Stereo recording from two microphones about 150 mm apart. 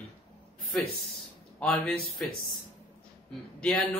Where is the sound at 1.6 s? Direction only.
5° left (ahead or behind).